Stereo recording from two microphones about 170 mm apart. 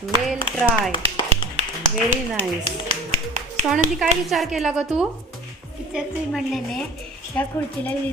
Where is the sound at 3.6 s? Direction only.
5° right (ahead or behind).